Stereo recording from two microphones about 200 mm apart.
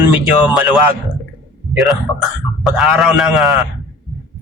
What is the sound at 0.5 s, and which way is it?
Speech, 5° right (ahead or behind).